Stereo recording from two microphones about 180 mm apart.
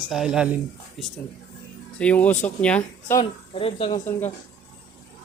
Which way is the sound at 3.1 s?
30° left (ahead or behind).